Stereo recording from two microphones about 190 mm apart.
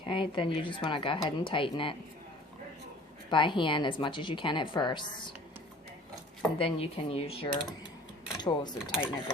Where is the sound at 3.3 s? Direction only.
25° left (ahead or behind).